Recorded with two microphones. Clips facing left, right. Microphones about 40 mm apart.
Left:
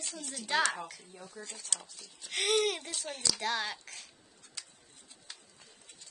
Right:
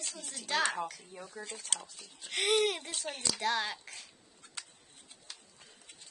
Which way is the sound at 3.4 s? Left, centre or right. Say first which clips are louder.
Right 3 dB; centre.